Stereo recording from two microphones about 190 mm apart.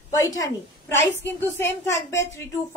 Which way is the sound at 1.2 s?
15° left (ahead or behind).